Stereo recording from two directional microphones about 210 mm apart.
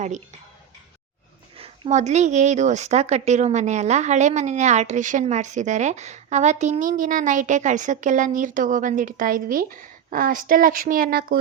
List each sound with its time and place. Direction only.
1.5 s a woman's voice: 25° right (ahead or behind); by 11.3 s 45° right (ahead or behind)